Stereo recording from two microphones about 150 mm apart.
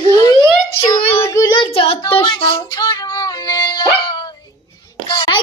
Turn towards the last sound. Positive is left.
turn(degrees=35)  # may be behind; listen again after turning